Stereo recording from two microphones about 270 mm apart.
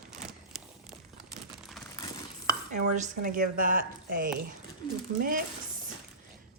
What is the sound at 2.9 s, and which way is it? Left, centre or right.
Speech, right.